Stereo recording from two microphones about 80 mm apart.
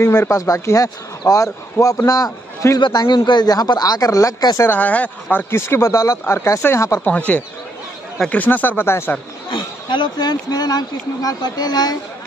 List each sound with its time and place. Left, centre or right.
0.0 s speech: left
0.3 s a man's voice: left
2.8 s speech: left
4.6 s speech: centre; by 7.0 s left
7.1 s speech: centre
9.5 s speech: left